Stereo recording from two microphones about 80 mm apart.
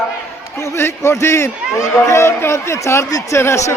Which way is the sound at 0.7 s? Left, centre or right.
Left.